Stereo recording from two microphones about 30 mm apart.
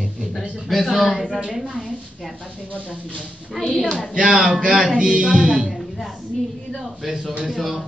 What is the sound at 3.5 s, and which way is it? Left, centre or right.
Speech, centre.